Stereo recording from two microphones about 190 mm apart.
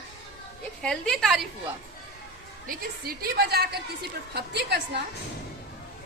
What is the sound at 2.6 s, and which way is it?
A woman's voice, 50° right (ahead or behind).